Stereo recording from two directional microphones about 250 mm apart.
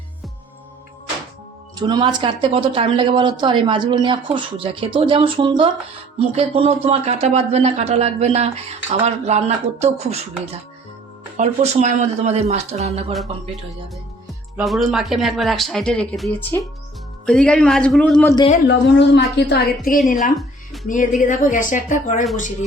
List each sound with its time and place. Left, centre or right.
1.7 s a woman's voice: centre
14.3 s speech: centre
18.3 s speech: left
18.7 s a woman's voice: left